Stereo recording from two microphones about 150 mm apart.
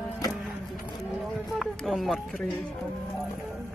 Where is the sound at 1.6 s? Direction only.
Centre (ahead or behind).